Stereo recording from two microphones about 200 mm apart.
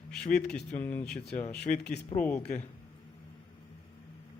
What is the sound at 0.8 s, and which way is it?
Speech, 10° left (ahead or behind).